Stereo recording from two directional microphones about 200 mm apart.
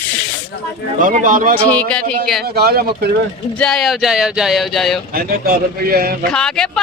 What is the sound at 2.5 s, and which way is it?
Speech, 50° right (ahead or behind).